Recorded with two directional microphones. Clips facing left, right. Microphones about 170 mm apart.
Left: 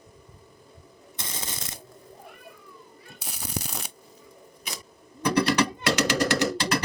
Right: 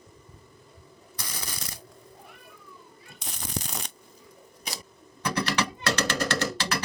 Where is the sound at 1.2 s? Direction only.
25° left (ahead or behind).